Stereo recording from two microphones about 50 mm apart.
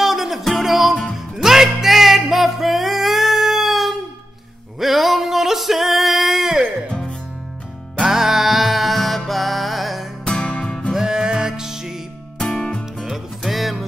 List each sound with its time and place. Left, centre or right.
0.0 s music: centre
6.9 s music: centre
8.0 s music: centre
10.2 s music: centre
10.9 s music: centre
12.4 s music: centre
13.0 s music: centre